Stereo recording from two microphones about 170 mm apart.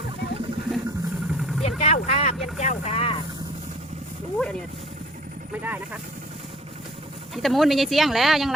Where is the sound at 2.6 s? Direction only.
40° left (ahead or behind).